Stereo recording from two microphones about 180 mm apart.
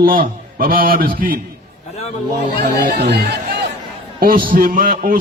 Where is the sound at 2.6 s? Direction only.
65° right (ahead or behind).